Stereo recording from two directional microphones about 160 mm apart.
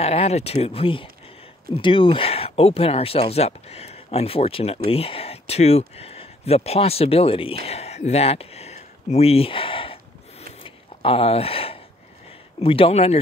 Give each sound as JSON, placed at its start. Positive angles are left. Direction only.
{"t": 0.0, "sound": "speech", "side_deg": 40}
{"t": 10.6, "sound": "a sound", "side_deg": 35}
{"t": 12.5, "sound": "speech", "side_deg": 35}